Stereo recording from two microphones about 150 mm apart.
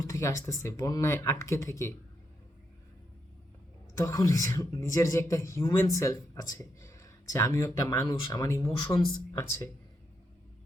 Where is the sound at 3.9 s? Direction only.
20° left (ahead or behind).